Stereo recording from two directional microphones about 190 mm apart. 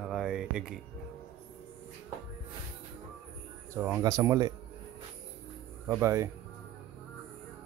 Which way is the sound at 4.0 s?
15° right (ahead or behind).